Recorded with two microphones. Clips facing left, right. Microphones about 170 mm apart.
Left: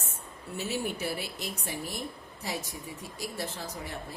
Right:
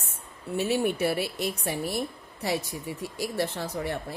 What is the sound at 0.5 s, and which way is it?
A woman's voice, 65° right (ahead or behind).